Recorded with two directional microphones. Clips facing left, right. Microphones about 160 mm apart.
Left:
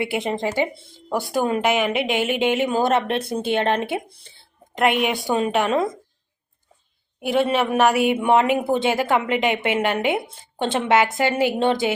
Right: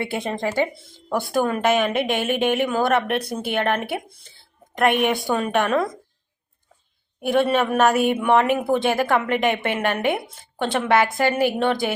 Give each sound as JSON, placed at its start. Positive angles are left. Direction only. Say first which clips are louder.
{"t": 0.0, "sound": "a woman's voice", "louder": "left 2 dB", "side_deg": 15}
{"t": 7.2, "sound": "a woman's voice", "louder": "right 1 dB", "side_deg": 20}